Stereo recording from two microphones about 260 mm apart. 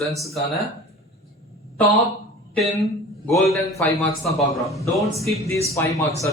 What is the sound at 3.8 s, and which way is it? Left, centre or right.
A man's voice, centre.